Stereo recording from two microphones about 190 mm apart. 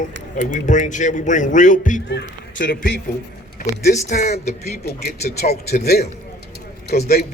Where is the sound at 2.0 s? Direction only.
55° left (ahead or behind).